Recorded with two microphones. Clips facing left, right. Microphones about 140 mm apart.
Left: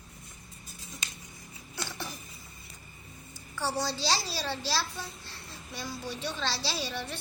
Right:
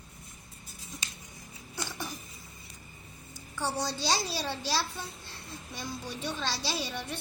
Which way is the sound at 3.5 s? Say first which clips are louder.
Left 1 dB; 15° right (ahead or behind).